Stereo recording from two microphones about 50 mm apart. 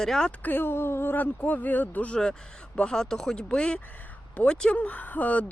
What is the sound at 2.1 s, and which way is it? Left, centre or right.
Speech, centre.